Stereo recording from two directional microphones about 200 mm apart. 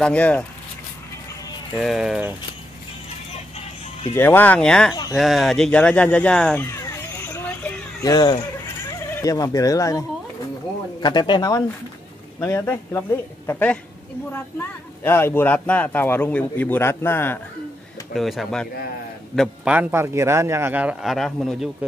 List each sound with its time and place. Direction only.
0.0 s speech: 5° left (ahead or behind)
1.8 s speech: centre (ahead or behind)
4.1 s speech: 10° left (ahead or behind)
18.1 s a man's voice: centre (ahead or behind)